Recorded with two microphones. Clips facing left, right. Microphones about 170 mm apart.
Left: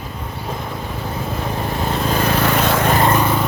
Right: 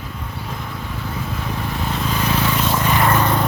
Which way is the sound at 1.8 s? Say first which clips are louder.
Left 4 dB; 50° left (ahead or behind).